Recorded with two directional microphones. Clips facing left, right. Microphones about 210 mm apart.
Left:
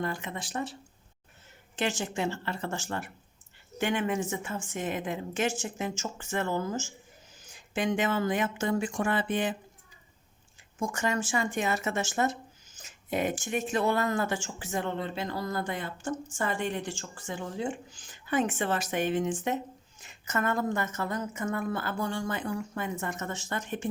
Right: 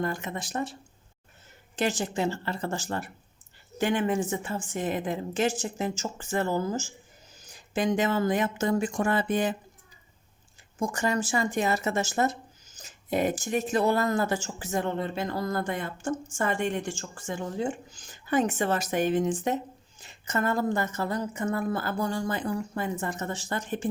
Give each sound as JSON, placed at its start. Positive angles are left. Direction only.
{"t": 0.0, "sound": "speech", "side_deg": -45}
{"t": 10.8, "sound": "speech", "side_deg": -35}